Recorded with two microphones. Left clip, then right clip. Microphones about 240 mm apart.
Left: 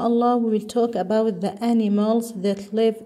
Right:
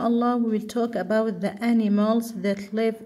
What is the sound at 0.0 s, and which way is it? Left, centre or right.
Speech, centre.